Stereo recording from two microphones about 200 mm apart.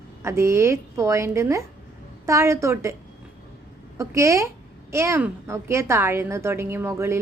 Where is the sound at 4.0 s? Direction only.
15° right (ahead or behind).